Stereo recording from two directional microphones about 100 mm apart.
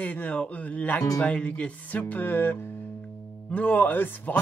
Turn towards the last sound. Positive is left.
turn(degrees=20)  # may be behind; listen again after turning